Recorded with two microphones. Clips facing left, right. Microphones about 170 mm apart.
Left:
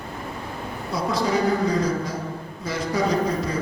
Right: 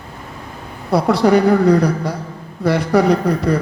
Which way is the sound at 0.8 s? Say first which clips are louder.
Right 11 dB; 65° right (ahead or behind).